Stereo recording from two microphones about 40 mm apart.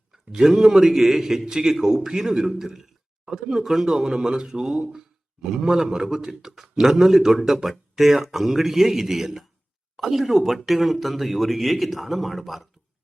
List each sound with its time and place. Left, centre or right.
0.3 s a man's voice: centre